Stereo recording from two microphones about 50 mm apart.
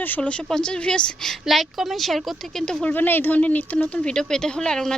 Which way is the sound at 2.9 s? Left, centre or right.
Left.